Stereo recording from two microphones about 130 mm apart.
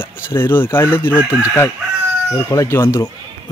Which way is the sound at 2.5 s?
25° left (ahead or behind).